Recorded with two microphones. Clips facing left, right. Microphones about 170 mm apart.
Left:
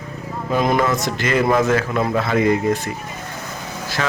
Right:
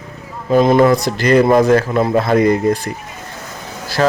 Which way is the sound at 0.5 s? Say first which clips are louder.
Right 8 dB; 30° right (ahead or behind).